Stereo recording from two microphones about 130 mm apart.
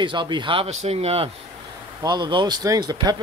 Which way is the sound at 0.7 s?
60° right (ahead or behind).